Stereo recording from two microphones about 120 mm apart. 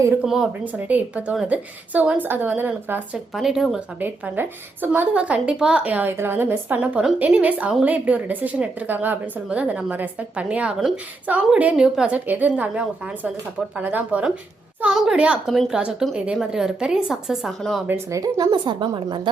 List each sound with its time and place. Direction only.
0.3 s a woman's voice: 10° right (ahead or behind)
3.3 s speech: 5° right (ahead or behind)
4.0 s a woman's voice: 15° right (ahead or behind); by 17.8 s centre (ahead or behind)
17.8 s a woman's voice: 25° right (ahead or behind)
18.6 s a woman's voice: 40° right (ahead or behind)